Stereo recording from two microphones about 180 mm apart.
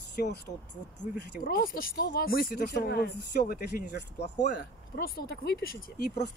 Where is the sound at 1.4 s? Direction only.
50° left (ahead or behind).